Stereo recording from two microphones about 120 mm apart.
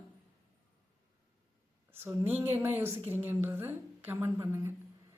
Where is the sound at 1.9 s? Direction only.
20° right (ahead or behind).